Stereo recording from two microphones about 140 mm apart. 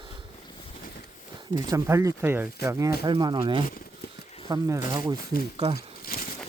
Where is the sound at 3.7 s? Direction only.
90° left.